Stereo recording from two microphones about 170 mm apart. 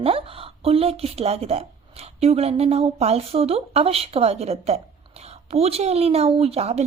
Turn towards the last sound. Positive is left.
turn(degrees=-35)  # may be behind; listen again after turning